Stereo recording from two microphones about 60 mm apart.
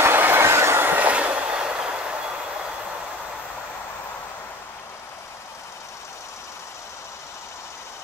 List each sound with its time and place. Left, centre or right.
0.0 s train: right
0.9 s train: right